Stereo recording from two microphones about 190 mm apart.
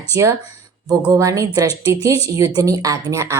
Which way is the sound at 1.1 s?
15° right (ahead or behind).